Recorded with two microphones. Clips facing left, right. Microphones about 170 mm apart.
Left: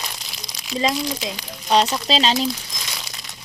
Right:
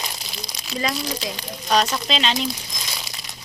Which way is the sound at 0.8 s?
25° left (ahead or behind).